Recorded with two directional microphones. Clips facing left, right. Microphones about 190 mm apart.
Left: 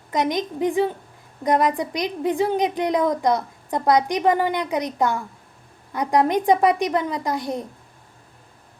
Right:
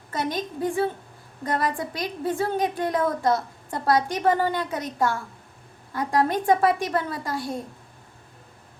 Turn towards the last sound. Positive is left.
turn(degrees=20)  # may be behind; listen again after turning